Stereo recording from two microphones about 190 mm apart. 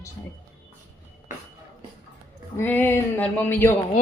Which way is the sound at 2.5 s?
10° left (ahead or behind).